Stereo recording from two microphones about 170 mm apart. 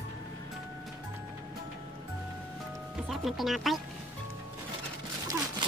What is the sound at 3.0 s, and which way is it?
Speech, centre (ahead or behind).